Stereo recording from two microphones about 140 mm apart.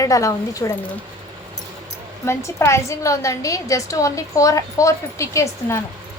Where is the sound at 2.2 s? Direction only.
20° left (ahead or behind).